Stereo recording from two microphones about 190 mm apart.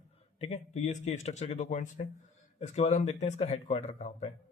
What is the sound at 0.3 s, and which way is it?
Speech, 35° left (ahead or behind).